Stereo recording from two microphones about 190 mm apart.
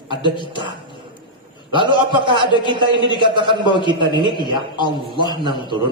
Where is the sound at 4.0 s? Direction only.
25° right (ahead or behind).